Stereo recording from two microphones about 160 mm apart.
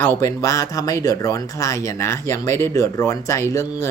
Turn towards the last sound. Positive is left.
turn(degrees=20)  # may be behind; listen again after turning